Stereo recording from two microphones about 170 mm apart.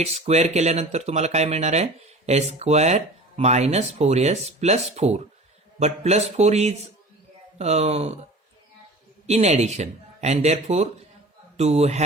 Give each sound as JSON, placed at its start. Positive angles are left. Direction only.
{"t": 0.0, "sound": "speech", "side_deg": -40}